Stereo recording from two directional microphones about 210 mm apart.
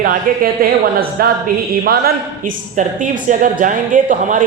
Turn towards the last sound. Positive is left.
turn(degrees=-40)  # may be behind; listen again after turning